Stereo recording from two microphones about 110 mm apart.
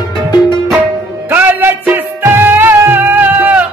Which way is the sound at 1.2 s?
20° right (ahead or behind).